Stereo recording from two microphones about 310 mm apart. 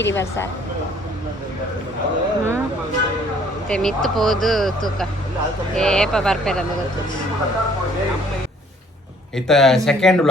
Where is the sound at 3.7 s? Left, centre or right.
Centre.